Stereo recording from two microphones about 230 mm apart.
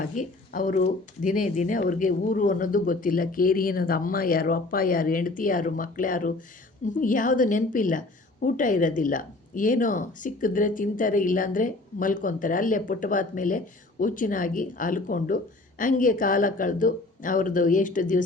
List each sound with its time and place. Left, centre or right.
0.0 s a woman's voice: left